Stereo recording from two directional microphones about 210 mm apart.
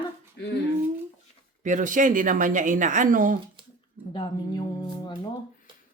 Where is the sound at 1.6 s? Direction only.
35° right (ahead or behind).